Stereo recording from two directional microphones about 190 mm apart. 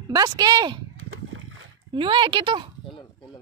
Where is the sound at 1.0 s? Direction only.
90° right.